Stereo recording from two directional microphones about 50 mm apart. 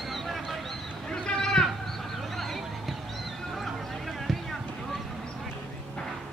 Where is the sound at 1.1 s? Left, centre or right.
Centre.